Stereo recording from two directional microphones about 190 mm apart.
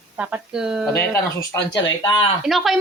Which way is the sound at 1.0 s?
10° left (ahead or behind).